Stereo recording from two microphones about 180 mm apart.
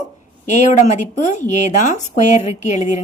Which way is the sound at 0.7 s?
40° left (ahead or behind).